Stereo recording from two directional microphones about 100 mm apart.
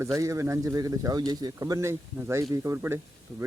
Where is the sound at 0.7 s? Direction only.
40° right (ahead or behind).